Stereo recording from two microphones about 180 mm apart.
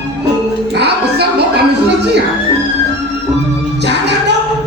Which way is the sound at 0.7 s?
65° right (ahead or behind).